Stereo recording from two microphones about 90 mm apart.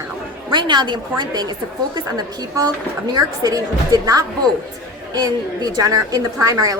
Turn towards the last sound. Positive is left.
turn(degrees=-40)  # may be behind; listen again after turning